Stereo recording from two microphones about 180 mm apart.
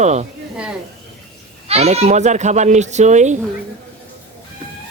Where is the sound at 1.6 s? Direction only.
35° right (ahead or behind).